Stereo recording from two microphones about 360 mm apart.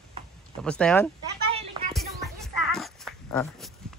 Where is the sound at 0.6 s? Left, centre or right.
Centre.